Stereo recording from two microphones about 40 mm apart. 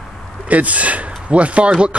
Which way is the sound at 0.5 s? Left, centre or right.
Right.